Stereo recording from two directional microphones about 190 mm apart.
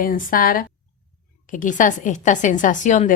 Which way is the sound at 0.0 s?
45° left (ahead or behind).